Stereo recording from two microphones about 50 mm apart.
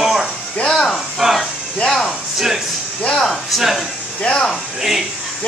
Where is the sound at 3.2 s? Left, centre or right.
Centre.